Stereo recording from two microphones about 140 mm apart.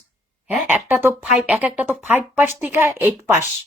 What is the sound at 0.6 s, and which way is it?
Speech, 15° right (ahead or behind).